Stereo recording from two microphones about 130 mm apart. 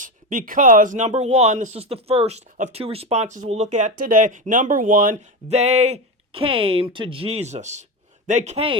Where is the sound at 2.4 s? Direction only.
80° right.